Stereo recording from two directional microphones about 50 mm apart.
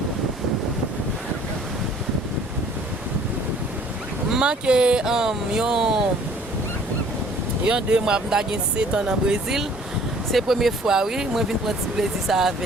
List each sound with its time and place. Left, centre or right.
4.3 s speech: centre
7.8 s speech: centre